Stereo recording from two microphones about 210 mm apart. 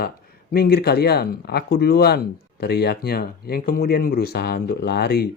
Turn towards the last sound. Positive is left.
turn(degrees=50)  # may be behind; listen again after turning